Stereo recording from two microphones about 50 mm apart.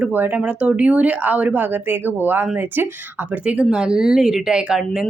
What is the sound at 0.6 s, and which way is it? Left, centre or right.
Speech, right.